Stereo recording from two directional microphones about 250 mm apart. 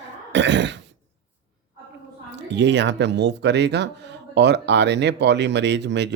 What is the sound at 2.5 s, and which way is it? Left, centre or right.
Speech, right.